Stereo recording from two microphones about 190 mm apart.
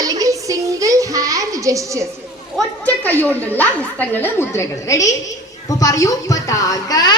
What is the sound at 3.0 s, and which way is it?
A woman's voice, 10° left (ahead or behind).